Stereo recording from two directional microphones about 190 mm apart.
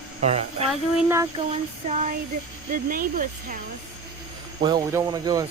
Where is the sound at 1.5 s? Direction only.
35° right (ahead or behind).